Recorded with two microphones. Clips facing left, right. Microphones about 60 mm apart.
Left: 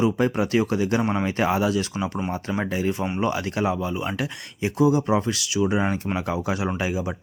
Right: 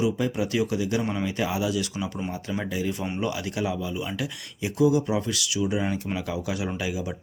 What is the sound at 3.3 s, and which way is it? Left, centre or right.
Speech, left.